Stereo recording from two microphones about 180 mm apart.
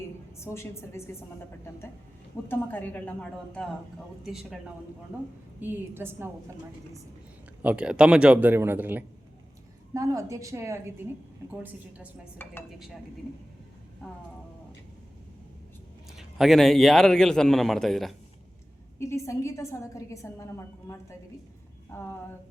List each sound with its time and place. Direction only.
0.3 s a woman's voice: 15° left (ahead or behind)
2.5 s a woman's voice: 10° left (ahead or behind)
5.5 s a man's voice: 10° right (ahead or behind)
7.6 s a man's voice: 5° right (ahead or behind)
12.4 s a woman's voice: 10° left (ahead or behind)
16.1 s a man's voice: centre (ahead or behind)
18.9 s a woman's voice: 15° left (ahead or behind)